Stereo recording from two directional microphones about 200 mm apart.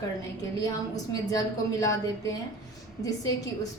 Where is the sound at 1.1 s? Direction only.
15° left (ahead or behind).